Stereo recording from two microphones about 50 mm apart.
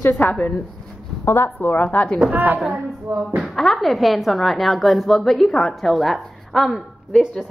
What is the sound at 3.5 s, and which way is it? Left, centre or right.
A woman's voice, centre.